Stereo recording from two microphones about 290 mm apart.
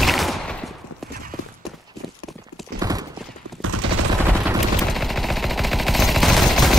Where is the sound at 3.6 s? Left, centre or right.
Right.